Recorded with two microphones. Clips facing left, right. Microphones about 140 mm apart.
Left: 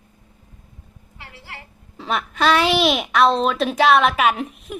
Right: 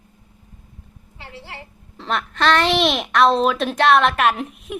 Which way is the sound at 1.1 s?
30° right (ahead or behind).